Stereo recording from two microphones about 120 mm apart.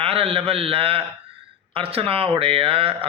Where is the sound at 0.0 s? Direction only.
50° right (ahead or behind).